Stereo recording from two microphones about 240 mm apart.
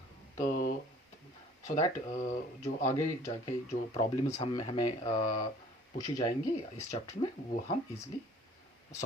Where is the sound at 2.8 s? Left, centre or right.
Centre.